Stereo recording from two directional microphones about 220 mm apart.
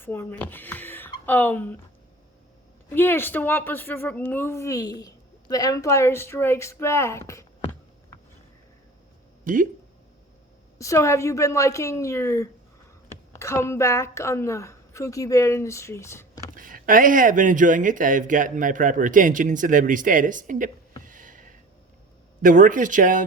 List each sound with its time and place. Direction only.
0.0 s speech: 10° left (ahead or behind)
2.9 s speech: 10° left (ahead or behind)
9.4 s speech: 40° right (ahead or behind)
10.8 s speech: 15° left (ahead or behind)
16.6 s speech: 40° right (ahead or behind)
21.0 s a sound: 35° right (ahead or behind)
22.4 s speech: 35° right (ahead or behind)